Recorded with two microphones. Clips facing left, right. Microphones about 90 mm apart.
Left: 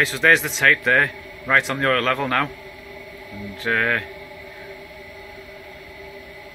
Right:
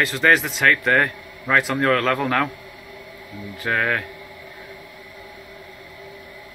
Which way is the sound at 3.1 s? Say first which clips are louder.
Left 1 dB; 20° right (ahead or behind).